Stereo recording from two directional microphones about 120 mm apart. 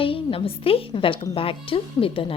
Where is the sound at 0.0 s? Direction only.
50° left (ahead or behind).